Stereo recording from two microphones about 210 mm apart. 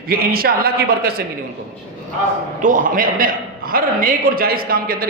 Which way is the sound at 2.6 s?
40° right (ahead or behind).